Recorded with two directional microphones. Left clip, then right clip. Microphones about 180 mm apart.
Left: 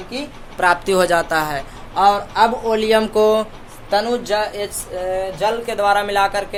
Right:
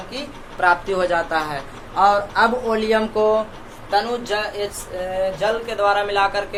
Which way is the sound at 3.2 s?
65° left (ahead or behind).